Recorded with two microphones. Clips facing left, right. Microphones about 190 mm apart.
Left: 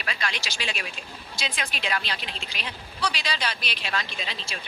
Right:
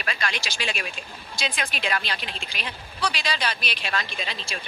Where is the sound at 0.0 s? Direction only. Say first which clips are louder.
Right 2 dB; 50° right (ahead or behind).